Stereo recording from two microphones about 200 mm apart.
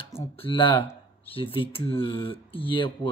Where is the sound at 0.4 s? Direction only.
25° left (ahead or behind).